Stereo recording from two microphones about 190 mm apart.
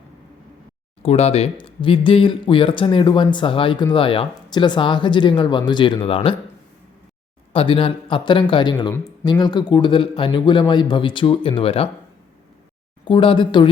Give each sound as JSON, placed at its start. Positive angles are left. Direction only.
{"t": 1.0, "sound": "speech", "side_deg": 30}
{"t": 7.5, "sound": "speech", "side_deg": 30}
{"t": 13.1, "sound": "speech", "side_deg": 25}